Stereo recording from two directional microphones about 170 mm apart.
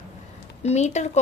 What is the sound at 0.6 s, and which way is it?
Speech, 40° left (ahead or behind).